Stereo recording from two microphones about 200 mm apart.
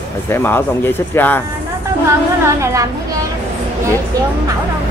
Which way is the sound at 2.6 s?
15° right (ahead or behind).